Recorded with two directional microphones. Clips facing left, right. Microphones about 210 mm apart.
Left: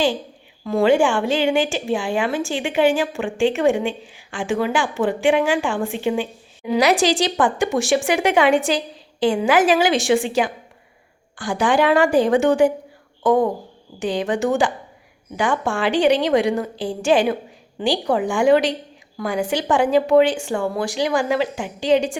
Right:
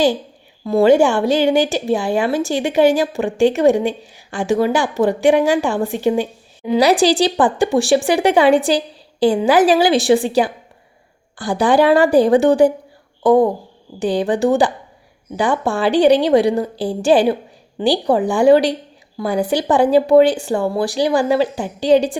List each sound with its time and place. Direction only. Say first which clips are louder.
0.6 s a woman's voice: right 4 dB; 35° right (ahead or behind)